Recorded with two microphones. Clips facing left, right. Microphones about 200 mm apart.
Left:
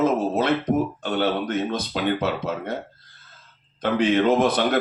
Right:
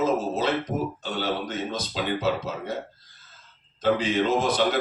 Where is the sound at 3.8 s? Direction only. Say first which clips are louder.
Left 3 dB; 60° left (ahead or behind).